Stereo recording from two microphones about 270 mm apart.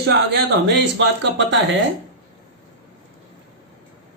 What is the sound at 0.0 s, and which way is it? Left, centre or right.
Speech, right.